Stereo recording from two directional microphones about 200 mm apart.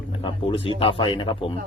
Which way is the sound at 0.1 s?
25° left (ahead or behind).